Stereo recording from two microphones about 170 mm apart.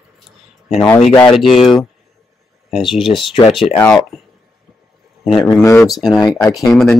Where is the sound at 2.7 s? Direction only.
Centre (ahead or behind).